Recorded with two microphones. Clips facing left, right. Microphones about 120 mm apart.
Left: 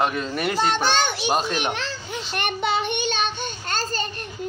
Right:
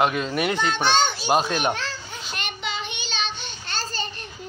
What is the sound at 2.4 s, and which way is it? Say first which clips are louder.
Child singing: left 8 dB; 55° left (ahead or behind).